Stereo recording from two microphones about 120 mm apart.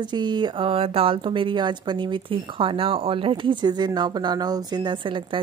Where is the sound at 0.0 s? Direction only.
40° right (ahead or behind).